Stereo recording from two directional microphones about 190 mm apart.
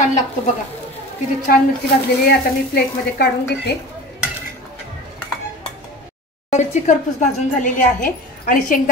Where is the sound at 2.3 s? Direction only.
60° left (ahead or behind).